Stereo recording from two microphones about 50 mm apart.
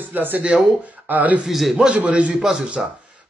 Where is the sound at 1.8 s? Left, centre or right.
Right.